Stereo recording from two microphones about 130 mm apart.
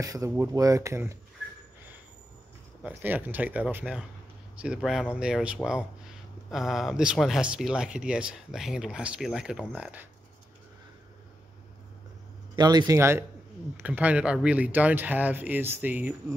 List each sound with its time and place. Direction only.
0.0 s speech: 25° right (ahead or behind)
2.8 s speech: 15° right (ahead or behind)
12.5 s speech: 30° right (ahead or behind); by 16.3 s 15° right (ahead or behind)